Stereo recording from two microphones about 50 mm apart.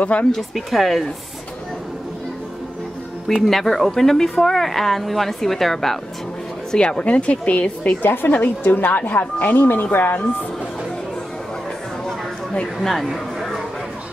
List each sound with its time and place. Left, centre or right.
0.0 s speech: left
0.3 s speech: centre
3.4 s speech: centre
6.7 s speech: centre
8.0 s a woman's voice: left
12.8 s speech: centre